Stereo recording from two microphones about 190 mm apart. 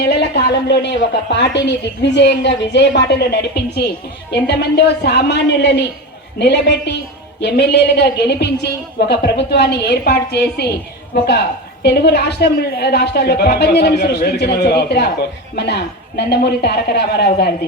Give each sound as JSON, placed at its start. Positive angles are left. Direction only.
{"t": 0.0, "sound": "a woman's voice", "side_deg": 60}
{"t": 11.8, "sound": "a woman's voice", "side_deg": 60}
{"t": 16.1, "sound": "a woman's voice", "side_deg": 60}